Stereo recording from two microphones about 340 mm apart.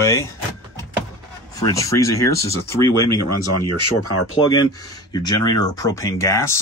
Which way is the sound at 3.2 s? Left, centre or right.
Left.